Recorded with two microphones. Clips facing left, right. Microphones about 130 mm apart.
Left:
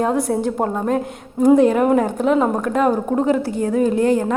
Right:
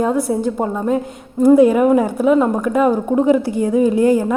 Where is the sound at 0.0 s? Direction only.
Centre (ahead or behind).